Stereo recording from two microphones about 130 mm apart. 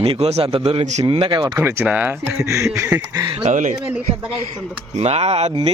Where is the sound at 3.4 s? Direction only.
70° right (ahead or behind).